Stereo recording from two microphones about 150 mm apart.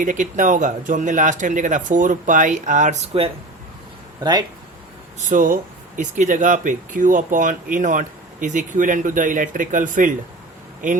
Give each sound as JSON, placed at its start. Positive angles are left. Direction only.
{"t": 0.0, "sound": "speech", "side_deg": -60}
{"t": 4.2, "sound": "speech", "side_deg": -30}
{"t": 5.2, "sound": "speech", "side_deg": -60}